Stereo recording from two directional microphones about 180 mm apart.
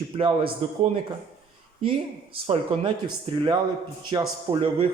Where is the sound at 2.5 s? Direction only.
30° right (ahead or behind).